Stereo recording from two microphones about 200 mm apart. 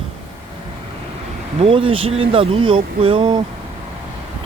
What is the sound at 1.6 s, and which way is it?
Speech, 25° right (ahead or behind).